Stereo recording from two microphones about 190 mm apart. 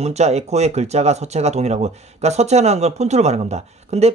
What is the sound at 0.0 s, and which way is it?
Speech, 35° right (ahead or behind).